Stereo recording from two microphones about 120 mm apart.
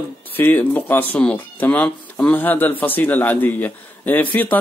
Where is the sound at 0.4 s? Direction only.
15° left (ahead or behind).